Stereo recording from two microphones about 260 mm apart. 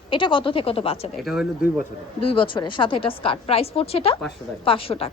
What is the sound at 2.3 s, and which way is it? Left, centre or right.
A woman's voice, centre.